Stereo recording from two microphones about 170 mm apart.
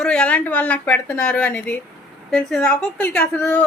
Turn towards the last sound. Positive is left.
turn(degrees=10)  # may be behind; listen again after turning